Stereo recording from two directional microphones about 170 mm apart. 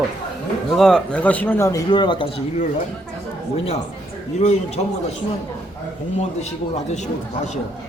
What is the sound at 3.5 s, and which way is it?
A man's voice, 35° left (ahead or behind).